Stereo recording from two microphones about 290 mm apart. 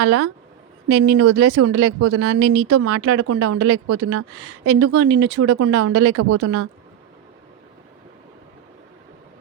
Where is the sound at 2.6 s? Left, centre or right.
Right.